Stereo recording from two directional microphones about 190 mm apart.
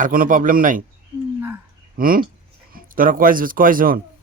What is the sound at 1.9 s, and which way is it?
A man's voice, 50° right (ahead or behind).